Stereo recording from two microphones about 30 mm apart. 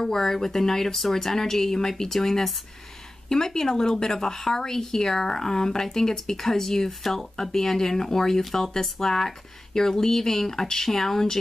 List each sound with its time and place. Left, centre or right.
0.0 s a woman's voice: centre